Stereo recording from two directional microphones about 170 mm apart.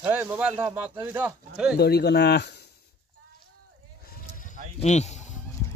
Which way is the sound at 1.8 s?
70° left (ahead or behind).